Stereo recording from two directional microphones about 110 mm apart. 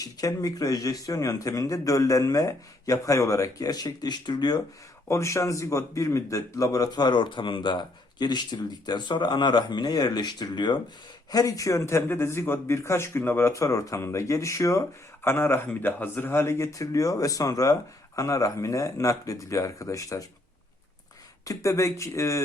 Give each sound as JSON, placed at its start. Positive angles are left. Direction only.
{"t": 0.0, "sound": "speech", "side_deg": 30}
{"t": 5.0, "sound": "speech", "side_deg": 25}
{"t": 21.4, "sound": "speech", "side_deg": 30}